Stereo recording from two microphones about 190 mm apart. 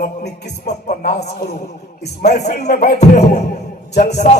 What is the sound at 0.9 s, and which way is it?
Music, 40° left (ahead or behind).